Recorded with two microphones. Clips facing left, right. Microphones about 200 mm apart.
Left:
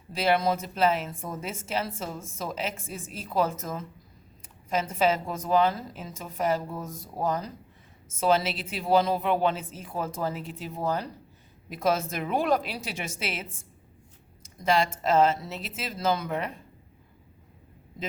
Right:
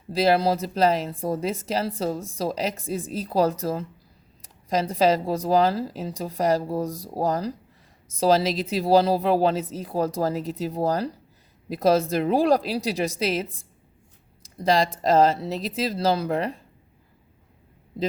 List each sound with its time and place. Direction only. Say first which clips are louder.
0.1 s a woman's voice: right 4 dB; 35° right (ahead or behind)